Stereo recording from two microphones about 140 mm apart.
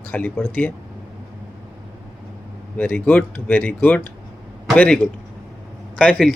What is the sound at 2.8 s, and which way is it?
Speech, 10° left (ahead or behind).